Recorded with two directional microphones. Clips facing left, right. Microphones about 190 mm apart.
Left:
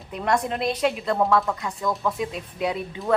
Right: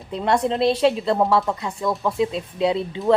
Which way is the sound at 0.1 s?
30° right (ahead or behind).